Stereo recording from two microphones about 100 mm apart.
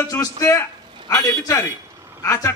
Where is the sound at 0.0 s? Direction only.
30° left (ahead or behind).